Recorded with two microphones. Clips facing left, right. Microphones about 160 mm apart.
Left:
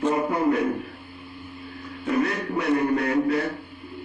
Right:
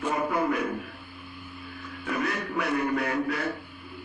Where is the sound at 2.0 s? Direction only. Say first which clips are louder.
Left 6 dB; 35° left (ahead or behind).